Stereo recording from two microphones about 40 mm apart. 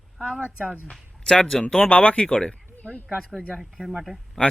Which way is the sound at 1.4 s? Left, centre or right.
Centre.